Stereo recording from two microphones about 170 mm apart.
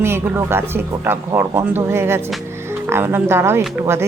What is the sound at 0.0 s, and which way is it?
Speech, 15° right (ahead or behind).